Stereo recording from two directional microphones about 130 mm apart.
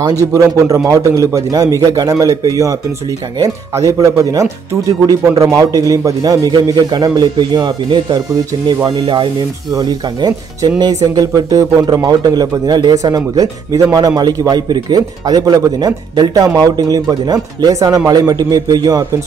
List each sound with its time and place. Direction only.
0.3 s a man's voice: 25° right (ahead or behind)